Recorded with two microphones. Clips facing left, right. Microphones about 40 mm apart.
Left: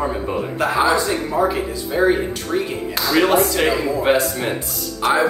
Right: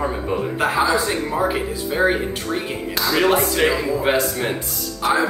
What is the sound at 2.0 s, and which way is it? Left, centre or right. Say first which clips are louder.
Speech: left 2 dB; right.